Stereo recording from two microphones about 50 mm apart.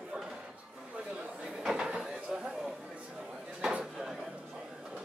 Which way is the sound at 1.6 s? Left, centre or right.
Centre.